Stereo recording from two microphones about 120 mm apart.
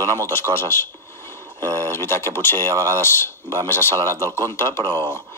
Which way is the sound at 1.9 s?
20° left (ahead or behind).